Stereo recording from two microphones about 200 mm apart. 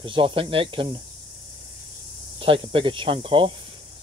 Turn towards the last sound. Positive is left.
turn(degrees=-25)  # may be behind; listen again after turning